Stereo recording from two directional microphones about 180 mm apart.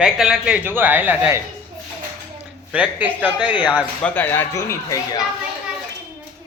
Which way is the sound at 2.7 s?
10° right (ahead or behind).